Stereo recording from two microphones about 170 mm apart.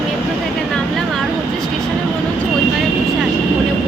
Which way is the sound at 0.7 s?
Centre (ahead or behind).